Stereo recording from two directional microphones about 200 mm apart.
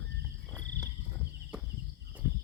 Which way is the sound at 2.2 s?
15° right (ahead or behind).